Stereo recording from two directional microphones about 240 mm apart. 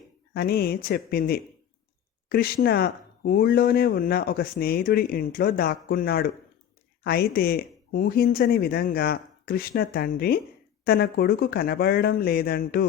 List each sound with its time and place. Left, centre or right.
0.3 s speech: left